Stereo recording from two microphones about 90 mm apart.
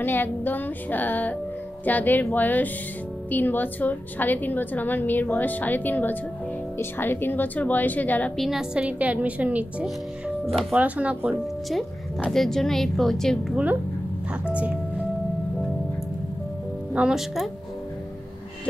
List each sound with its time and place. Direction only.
0.0 s a woman's voice: 20° left (ahead or behind)
8.4 s a woman's voice: 5° right (ahead or behind)
9.8 s speech: centre (ahead or behind)
10.7 s a woman's voice: 15° right (ahead or behind)
12.3 s speech: 5° left (ahead or behind)
14.3 s a woman's voice: 15° right (ahead or behind)
16.9 s speech: 10° right (ahead or behind)